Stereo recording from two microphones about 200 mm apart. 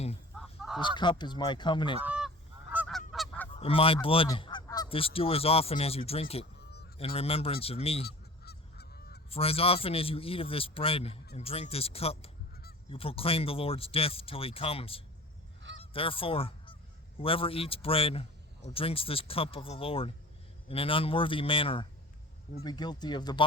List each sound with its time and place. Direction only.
0.3 s goose: centre (ahead or behind)
0.8 s speech: 25° left (ahead or behind)
2.0 s goose: 5° right (ahead or behind)
3.5 s goose: 30° left (ahead or behind)
6.4 s honk: 55° left (ahead or behind)
7.0 s speech: 30° left (ahead or behind)
8.0 s honk: 55° left (ahead or behind)
9.3 s speech: 30° left (ahead or behind)
15.8 s goose: 25° left (ahead or behind)
17.2 s speech: 30° left (ahead or behind)